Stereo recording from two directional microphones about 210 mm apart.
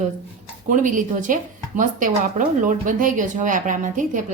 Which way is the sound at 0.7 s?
40° right (ahead or behind).